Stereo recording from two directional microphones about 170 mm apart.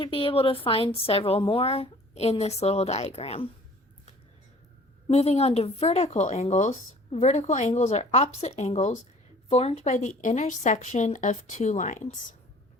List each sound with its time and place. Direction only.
0.0 s speech: 30° left (ahead or behind)
5.0 s speech: 35° left (ahead or behind)